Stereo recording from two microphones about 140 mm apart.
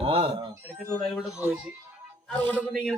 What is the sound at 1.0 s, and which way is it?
Speech, centre (ahead or behind).